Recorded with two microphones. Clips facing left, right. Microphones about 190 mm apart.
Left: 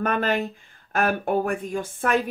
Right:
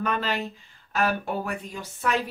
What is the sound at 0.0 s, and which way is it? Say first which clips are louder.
A woman's voice: left 4 dB; 50° left (ahead or behind).